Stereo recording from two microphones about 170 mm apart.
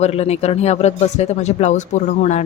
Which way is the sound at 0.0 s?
40° left (ahead or behind).